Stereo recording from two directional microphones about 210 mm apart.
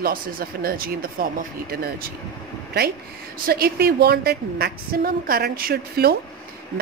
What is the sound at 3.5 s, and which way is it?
Speech, 45° right (ahead or behind).